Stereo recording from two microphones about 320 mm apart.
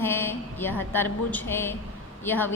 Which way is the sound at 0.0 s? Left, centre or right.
Centre.